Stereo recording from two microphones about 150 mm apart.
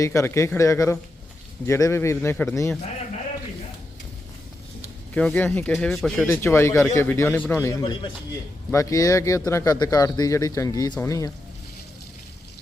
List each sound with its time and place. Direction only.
0.0 s a man's voice: 20° left (ahead or behind)
5.1 s a man's voice: 10° left (ahead or behind)
6.2 s a man's voice: 15° left (ahead or behind)